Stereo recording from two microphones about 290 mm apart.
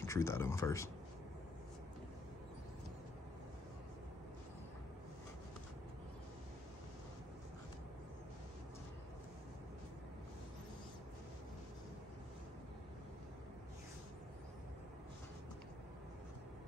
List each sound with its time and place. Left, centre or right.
0.0 s speech: centre